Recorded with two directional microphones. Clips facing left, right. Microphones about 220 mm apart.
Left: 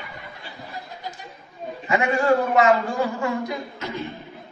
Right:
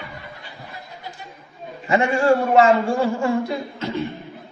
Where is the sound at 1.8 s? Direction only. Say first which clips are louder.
Right 3 dB; 30° right (ahead or behind).